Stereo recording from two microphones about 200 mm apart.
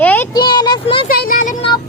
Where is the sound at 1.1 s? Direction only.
45° left (ahead or behind).